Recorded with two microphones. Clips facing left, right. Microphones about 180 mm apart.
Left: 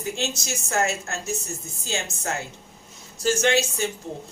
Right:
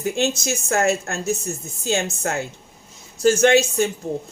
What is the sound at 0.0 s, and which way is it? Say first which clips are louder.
Speech: right 7 dB; 55° right (ahead or behind).